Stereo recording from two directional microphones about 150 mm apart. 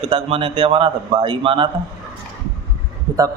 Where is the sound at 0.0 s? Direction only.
40° right (ahead or behind).